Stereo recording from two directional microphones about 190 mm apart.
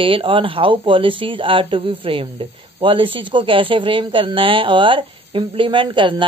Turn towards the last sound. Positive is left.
turn(degrees=-25)  # may be behind; listen again after turning